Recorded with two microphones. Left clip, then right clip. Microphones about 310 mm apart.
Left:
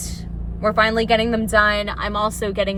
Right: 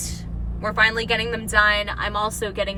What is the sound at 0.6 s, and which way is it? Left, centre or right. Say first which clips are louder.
A woman's voice: left 2 dB; centre.